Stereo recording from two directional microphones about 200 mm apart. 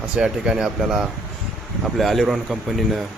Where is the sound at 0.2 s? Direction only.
5° right (ahead or behind).